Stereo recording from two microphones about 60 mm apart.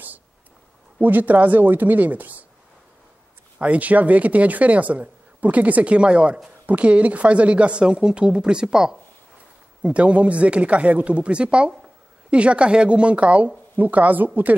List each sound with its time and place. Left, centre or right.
0.9 s speech: right
3.5 s speech: right